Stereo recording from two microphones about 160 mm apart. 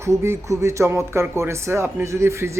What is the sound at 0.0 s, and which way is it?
Speech, 15° right (ahead or behind).